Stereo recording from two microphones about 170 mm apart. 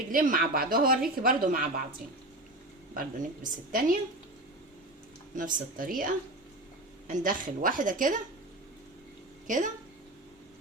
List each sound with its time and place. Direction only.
0.1 s speech: 55° right (ahead or behind)
2.9 s speech: 50° right (ahead or behind)
5.3 s a woman's voice: 50° right (ahead or behind)